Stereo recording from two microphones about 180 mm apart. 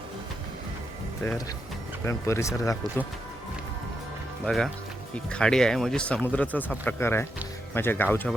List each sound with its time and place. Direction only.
2.0 s speech: 15° left (ahead or behind)
4.4 s speech: centre (ahead or behind)